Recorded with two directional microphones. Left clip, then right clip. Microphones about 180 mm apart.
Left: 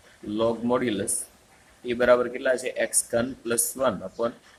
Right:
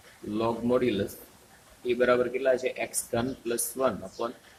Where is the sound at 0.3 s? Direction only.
45° left (ahead or behind).